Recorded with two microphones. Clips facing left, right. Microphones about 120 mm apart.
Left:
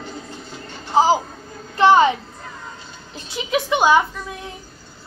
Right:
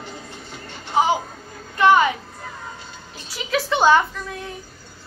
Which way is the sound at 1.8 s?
30° left (ahead or behind).